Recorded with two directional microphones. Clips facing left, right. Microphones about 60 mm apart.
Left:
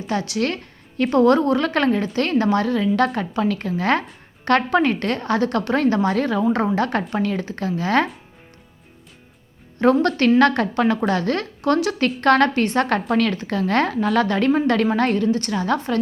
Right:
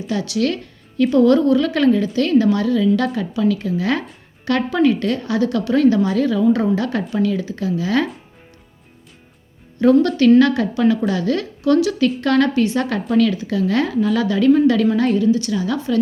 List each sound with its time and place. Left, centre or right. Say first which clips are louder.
0.1 s a woman's voice: right 2 dB; left
9.7 s a woman's voice: right 3 dB; left